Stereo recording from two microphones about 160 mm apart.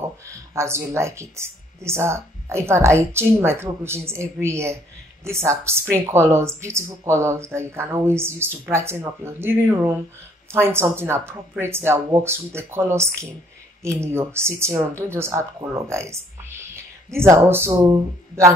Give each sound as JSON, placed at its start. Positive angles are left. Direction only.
{"t": 0.3, "sound": "speech", "side_deg": -15}